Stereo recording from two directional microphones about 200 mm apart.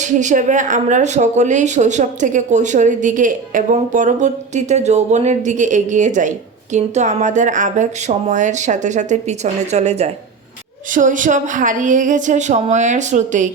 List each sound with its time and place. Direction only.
0.0 s speech: 40° right (ahead or behind)